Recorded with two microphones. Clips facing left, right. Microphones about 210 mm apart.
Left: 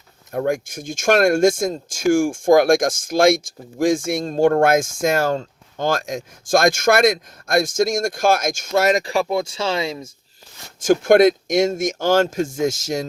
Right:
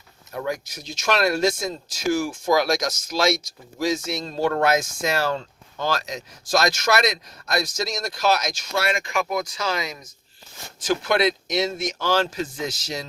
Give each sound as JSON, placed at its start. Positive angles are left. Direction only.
{"t": 0.3, "sound": "speech", "side_deg": 50}
{"t": 10.8, "sound": "speech", "side_deg": 45}